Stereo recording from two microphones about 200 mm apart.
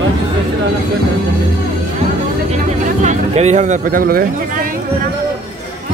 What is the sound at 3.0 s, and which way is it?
Speech, 35° right (ahead or behind).